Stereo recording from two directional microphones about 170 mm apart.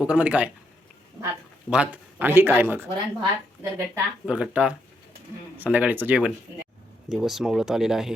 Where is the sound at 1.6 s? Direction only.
5° right (ahead or behind).